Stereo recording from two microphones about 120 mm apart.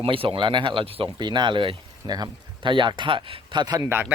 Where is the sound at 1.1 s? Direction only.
40° right (ahead or behind).